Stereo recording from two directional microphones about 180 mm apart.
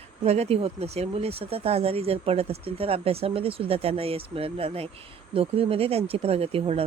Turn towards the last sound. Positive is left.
turn(degrees=-30)  # may be behind; listen again after turning